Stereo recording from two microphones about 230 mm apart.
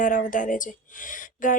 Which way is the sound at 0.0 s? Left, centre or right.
Left.